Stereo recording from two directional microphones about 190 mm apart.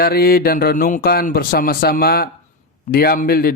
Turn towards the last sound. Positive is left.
turn(degrees=55)  # may be behind; listen again after turning